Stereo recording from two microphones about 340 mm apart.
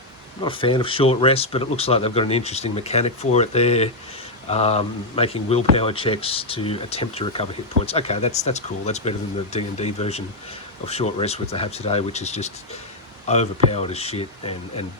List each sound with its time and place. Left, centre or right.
0.4 s speech: centre